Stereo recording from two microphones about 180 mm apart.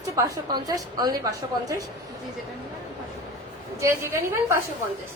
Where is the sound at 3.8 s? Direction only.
15° right (ahead or behind).